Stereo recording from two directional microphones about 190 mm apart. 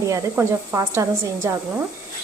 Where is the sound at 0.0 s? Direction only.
15° right (ahead or behind).